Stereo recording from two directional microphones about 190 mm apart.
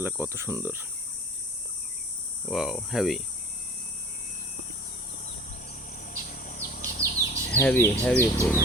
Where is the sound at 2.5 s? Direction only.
5° right (ahead or behind).